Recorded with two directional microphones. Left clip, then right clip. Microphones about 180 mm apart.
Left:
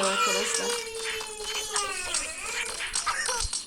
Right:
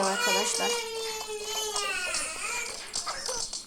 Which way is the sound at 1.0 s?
50° left (ahead or behind).